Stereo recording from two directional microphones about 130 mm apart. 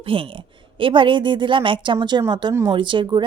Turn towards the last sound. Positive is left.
turn(degrees=-35)  # may be behind; listen again after turning